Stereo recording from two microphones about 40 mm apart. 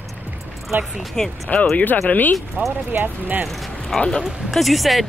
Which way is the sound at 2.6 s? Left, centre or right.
Right.